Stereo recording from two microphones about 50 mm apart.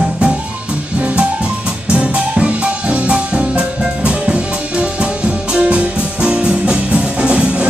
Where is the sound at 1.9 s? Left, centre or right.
Right.